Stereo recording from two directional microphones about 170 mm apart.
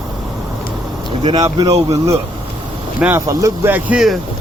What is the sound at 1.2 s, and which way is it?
Speech, 25° right (ahead or behind).